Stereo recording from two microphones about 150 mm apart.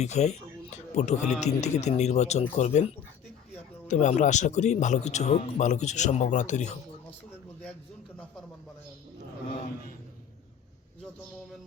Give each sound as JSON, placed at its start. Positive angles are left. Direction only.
{"t": 0.0, "sound": "speech", "side_deg": 50}
{"t": 3.8, "sound": "speech", "side_deg": 55}